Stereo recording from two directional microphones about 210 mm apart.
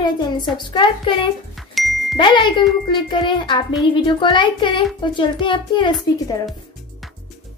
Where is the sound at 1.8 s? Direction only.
Centre (ahead or behind).